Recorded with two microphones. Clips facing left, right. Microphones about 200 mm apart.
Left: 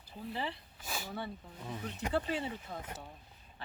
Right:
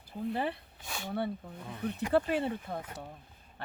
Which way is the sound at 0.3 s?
55° right (ahead or behind).